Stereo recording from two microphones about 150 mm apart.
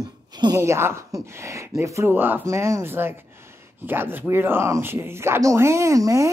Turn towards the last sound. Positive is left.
turn(degrees=-20)  # may be behind; listen again after turning